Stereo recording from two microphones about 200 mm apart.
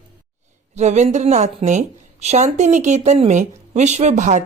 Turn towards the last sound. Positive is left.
turn(degrees=-35)  # may be behind; listen again after turning